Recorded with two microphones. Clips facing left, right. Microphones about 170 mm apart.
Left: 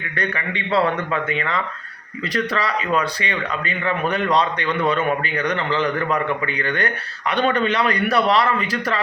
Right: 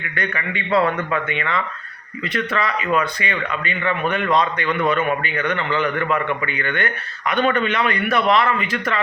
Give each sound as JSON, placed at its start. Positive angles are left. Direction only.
{"t": 0.2, "sound": "a man's voice", "side_deg": 30}